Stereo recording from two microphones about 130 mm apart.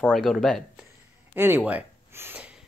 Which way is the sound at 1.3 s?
15° right (ahead or behind).